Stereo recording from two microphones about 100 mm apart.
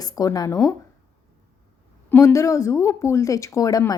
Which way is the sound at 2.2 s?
30° left (ahead or behind).